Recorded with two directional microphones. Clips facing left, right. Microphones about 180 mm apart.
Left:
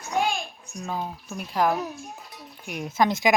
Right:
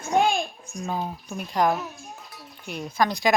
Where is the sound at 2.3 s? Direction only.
20° left (ahead or behind).